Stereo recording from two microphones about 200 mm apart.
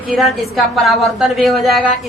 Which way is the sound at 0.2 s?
Centre (ahead or behind).